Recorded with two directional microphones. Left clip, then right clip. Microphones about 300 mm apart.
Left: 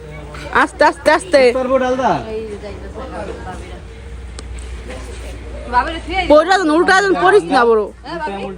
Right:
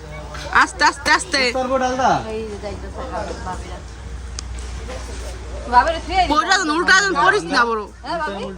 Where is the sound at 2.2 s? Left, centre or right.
Right.